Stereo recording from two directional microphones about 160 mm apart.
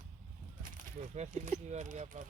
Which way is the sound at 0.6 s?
50° right (ahead or behind).